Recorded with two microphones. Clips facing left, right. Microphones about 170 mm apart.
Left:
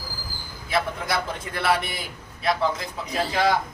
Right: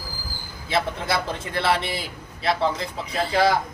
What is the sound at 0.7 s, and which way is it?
A man's voice, 25° right (ahead or behind).